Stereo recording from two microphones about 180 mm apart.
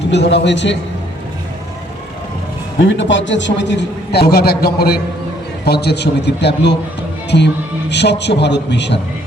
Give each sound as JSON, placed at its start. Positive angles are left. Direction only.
{"t": 0.1, "sound": "a man's voice", "side_deg": 70}
{"t": 2.8, "sound": "a man's voice", "side_deg": 90}